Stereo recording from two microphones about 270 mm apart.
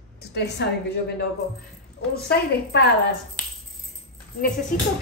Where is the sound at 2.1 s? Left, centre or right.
Left.